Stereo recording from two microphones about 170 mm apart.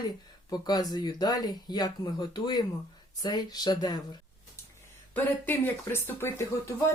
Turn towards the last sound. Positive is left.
turn(degrees=15)  # may be behind; listen again after turning